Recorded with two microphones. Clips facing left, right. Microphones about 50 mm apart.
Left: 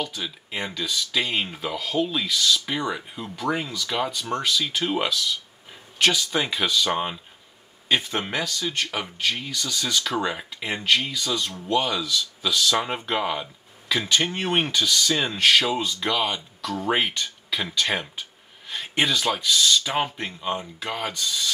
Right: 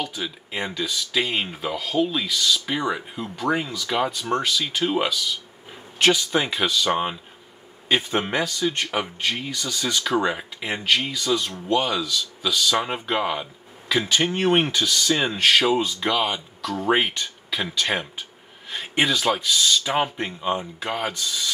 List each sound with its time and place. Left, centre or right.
0.0 s speech: centre